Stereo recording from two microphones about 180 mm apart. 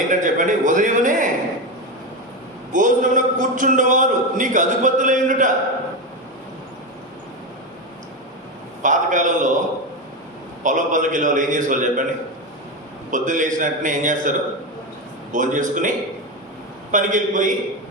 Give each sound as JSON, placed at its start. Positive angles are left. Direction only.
{"t": 0.1, "sound": "a man's voice", "side_deg": -45}
{"t": 2.7, "sound": "a man's voice", "side_deg": -45}
{"t": 8.8, "sound": "a man's voice", "side_deg": -45}
{"t": 10.6, "sound": "a man's voice", "side_deg": -45}
{"t": 13.1, "sound": "a man's voice", "side_deg": -45}
{"t": 16.9, "sound": "a man's voice", "side_deg": -45}